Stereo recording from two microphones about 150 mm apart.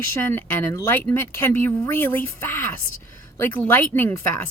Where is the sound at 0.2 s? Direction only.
15° left (ahead or behind).